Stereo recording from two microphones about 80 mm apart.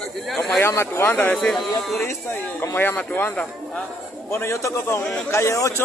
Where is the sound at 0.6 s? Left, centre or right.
Left.